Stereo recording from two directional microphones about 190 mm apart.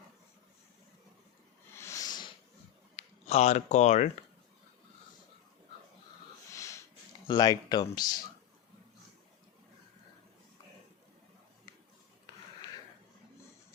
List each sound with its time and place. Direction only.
1.7 s a sound: 15° left (ahead or behind)
2.9 s speech: 35° left (ahead or behind)
6.5 s wheeze: 15° left (ahead or behind)
7.3 s speech: 20° left (ahead or behind)